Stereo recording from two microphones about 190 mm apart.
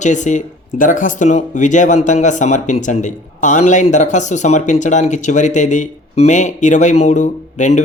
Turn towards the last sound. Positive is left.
turn(degrees=40)  # may be behind; listen again after turning